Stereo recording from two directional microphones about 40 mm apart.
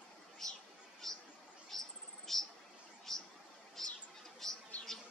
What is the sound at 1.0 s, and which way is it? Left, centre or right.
Chatter, centre.